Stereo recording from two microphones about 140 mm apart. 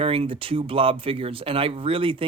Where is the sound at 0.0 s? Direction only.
45° right (ahead or behind).